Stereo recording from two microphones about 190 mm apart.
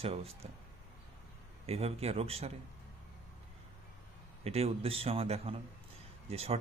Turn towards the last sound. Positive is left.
turn(degrees=-30)  # may be behind; listen again after turning